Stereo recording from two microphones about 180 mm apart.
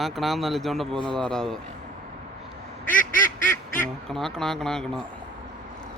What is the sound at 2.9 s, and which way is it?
Quack, 50° left (ahead or behind).